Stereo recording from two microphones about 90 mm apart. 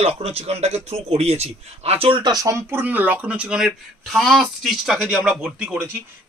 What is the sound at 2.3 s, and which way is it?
Speech, 40° right (ahead or behind).